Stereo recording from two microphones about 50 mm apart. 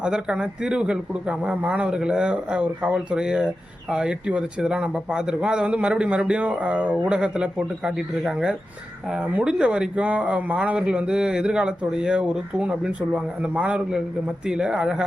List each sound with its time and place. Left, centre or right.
0.0 s speech: centre
7.9 s speech: centre
9.4 s speech: centre